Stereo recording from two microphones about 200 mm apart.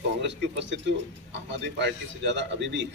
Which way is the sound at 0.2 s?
60° right (ahead or behind).